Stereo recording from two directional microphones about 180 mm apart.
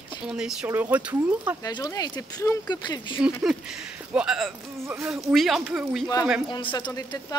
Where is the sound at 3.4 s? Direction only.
5° right (ahead or behind).